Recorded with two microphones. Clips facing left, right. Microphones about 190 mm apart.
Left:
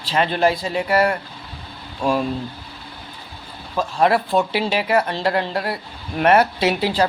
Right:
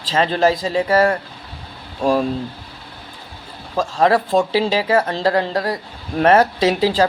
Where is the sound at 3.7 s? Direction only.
35° right (ahead or behind).